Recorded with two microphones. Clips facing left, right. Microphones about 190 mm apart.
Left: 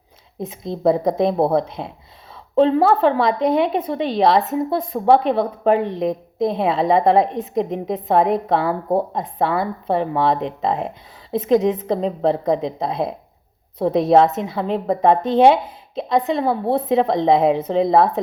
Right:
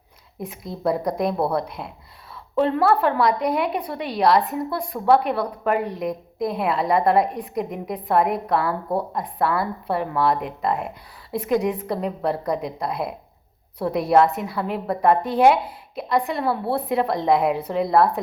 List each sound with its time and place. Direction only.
0.3 s a woman's voice: 20° left (ahead or behind)